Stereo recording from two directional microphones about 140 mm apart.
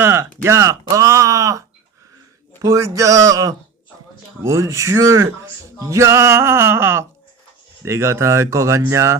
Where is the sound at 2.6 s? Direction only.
25° right (ahead or behind).